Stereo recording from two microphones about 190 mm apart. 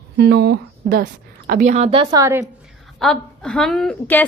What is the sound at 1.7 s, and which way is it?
Speech, 30° right (ahead or behind).